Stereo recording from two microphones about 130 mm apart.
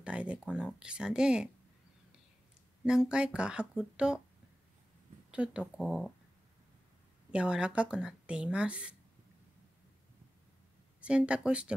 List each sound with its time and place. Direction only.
0.0 s speech: 10° right (ahead or behind)
2.8 s speech: 5° right (ahead or behind)
5.3 s speech: 10° right (ahead or behind)
7.2 s speech: 10° right (ahead or behind)
11.0 s speech: 10° right (ahead or behind)